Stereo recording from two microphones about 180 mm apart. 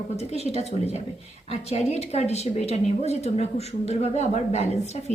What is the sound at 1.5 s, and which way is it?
A woman's voice, 35° left (ahead or behind).